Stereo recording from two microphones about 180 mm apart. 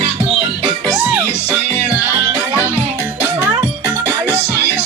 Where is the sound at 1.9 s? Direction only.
10° right (ahead or behind).